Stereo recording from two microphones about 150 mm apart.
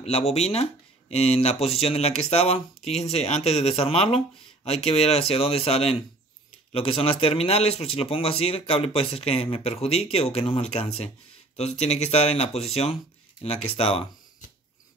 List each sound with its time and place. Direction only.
0.0 s a man's voice: 45° left (ahead or behind)